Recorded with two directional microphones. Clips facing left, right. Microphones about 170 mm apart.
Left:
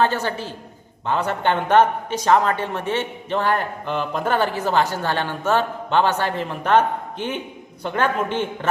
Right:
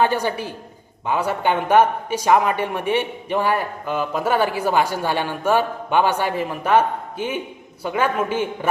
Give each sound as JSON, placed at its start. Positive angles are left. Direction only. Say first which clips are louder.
{"t": 0.0, "sound": "a man's voice", "louder": "right 1 dB", "side_deg": -15}